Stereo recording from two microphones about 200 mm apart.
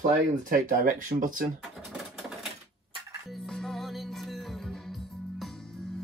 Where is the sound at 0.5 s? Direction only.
40° right (ahead or behind).